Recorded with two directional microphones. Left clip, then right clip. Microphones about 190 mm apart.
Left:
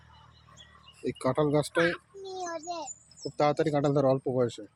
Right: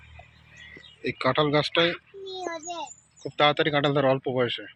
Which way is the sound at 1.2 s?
15° left (ahead or behind).